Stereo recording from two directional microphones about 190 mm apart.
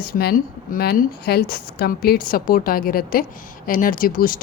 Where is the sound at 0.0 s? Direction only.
50° left (ahead or behind).